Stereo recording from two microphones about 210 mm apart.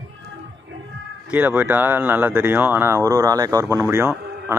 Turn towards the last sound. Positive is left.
turn(degrees=-10)  # may be behind; listen again after turning